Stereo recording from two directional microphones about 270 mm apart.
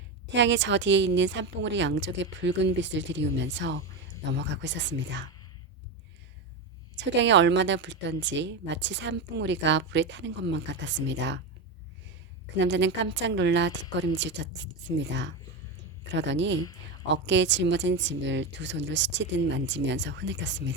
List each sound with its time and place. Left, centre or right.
0.3 s speech: right
6.9 s speech: right
12.5 s speech: right